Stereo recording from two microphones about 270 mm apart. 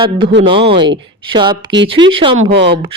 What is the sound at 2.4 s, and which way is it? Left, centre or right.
Speech, right.